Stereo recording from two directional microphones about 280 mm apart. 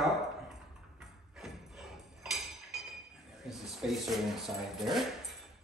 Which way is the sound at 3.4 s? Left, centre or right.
Centre.